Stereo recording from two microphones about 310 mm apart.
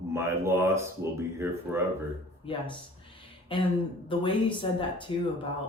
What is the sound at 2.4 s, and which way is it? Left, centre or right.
Speech, centre.